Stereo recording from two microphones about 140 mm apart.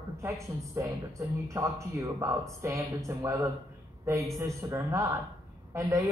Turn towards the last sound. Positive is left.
turn(degrees=-20)  # may be behind; listen again after turning